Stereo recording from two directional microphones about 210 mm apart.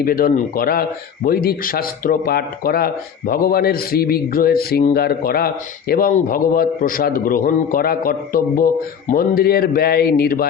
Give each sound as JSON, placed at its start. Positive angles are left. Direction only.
{"t": 0.0, "sound": "a man's voice", "side_deg": 45}